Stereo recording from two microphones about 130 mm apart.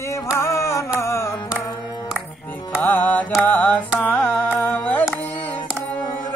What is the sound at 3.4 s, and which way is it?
Carnatic music, 15° left (ahead or behind).